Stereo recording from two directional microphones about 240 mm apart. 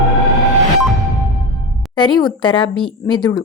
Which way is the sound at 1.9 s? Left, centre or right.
Centre.